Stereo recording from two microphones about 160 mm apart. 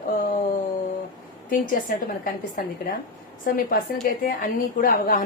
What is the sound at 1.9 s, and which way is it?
A woman's voice, 60° left (ahead or behind).